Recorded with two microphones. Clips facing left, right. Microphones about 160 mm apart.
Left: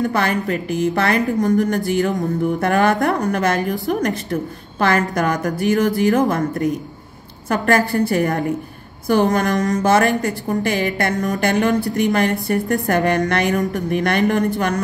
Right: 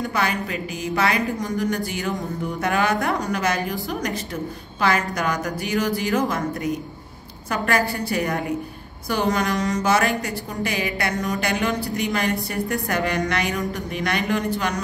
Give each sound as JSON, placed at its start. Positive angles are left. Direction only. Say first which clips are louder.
{"t": 0.1, "sound": "a woman's voice", "louder": "left 5 dB", "side_deg": 55}